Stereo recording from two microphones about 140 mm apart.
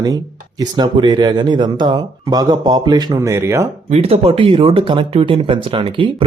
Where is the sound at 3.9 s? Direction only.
45° right (ahead or behind).